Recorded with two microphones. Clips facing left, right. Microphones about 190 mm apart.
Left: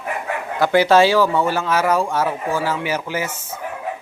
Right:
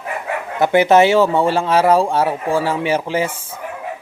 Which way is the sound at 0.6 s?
20° right (ahead or behind).